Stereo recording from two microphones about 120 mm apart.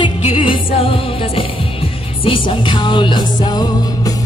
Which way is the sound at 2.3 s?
45° left (ahead or behind).